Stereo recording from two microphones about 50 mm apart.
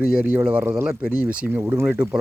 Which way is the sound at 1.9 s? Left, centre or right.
Right.